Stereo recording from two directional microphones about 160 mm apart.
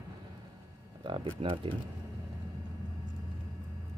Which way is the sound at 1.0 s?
30° right (ahead or behind).